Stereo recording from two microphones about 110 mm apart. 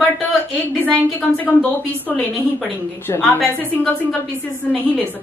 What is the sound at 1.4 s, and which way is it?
Speech, 15° left (ahead or behind).